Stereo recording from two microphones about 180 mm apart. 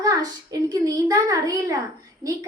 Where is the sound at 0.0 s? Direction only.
20° right (ahead or behind).